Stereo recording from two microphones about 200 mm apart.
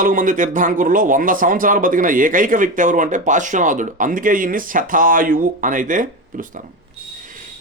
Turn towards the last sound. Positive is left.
turn(degrees=-40)  # may be behind; listen again after turning